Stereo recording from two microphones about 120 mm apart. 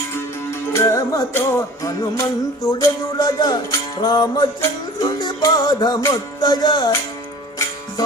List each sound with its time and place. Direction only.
0.7 s music: 25° left (ahead or behind)